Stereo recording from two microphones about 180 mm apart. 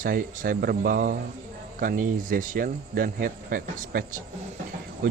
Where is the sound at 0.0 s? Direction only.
50° right (ahead or behind).